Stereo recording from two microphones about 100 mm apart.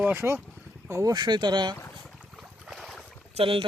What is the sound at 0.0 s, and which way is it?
Speech, 20° right (ahead or behind).